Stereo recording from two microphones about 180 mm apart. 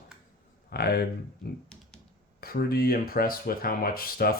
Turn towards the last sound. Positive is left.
turn(degrees=55)  # may be behind; listen again after turning